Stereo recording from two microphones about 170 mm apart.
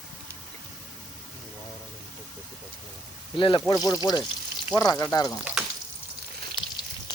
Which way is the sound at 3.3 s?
30° left (ahead or behind).